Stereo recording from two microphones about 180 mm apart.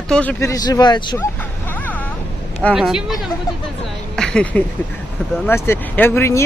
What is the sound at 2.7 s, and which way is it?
Speech, 5° right (ahead or behind).